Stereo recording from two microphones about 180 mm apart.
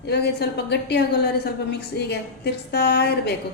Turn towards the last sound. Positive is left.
turn(degrees=65)  # may be behind; listen again after turning